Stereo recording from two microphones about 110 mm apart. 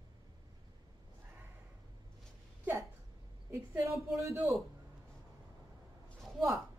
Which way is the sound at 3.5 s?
25° right (ahead or behind).